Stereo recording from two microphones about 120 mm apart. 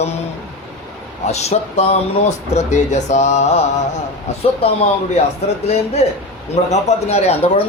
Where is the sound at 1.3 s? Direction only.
65° left (ahead or behind).